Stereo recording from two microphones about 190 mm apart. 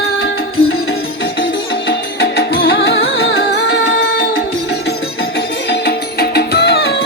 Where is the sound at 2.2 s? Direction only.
60° left (ahead or behind).